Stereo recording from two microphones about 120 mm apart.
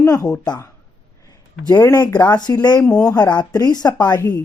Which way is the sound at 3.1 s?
35° left (ahead or behind).